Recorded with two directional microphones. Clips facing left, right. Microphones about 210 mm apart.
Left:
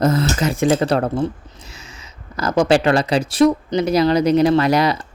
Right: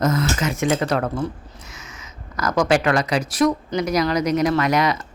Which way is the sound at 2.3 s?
30° left (ahead or behind).